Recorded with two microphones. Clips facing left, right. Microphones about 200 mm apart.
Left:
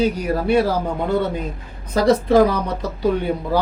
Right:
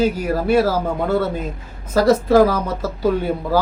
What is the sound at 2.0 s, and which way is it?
Speech, 5° right (ahead or behind).